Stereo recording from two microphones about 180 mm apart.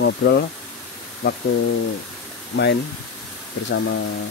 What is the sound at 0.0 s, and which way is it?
Speech, 70° left (ahead or behind).